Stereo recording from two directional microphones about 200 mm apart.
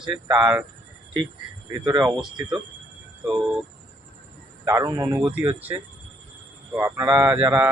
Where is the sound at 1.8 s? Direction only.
20° right (ahead or behind).